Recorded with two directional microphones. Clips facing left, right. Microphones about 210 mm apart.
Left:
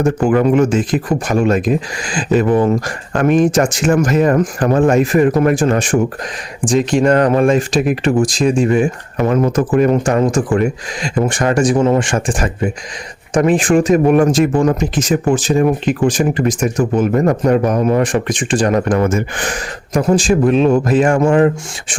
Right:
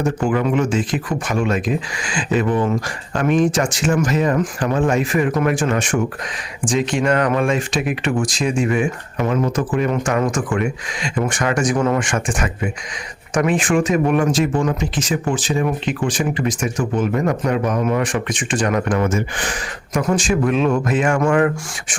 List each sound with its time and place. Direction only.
0.0 s speech: 45° left (ahead or behind)
19.9 s speech: 30° left (ahead or behind)